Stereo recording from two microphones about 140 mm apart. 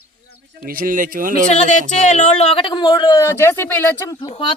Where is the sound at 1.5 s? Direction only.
65° left (ahead or behind).